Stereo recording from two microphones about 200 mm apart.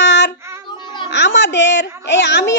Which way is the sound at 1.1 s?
60° left (ahead or behind).